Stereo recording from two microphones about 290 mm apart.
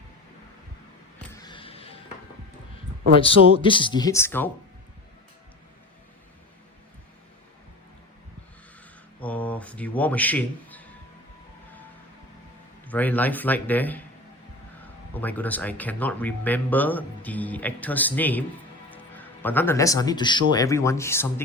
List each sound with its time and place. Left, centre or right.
1.4 s music: centre
3.2 s speech: centre
9.2 s a sound: centre
12.9 s speech: centre
15.1 s a man's voice: centre